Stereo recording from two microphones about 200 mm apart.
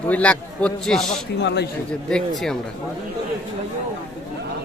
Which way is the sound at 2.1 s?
Centre (ahead or behind).